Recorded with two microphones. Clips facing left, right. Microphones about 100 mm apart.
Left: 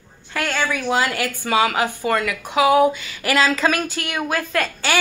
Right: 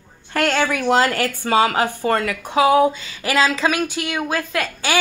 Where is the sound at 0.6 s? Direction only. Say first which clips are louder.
Even; 65° right (ahead or behind).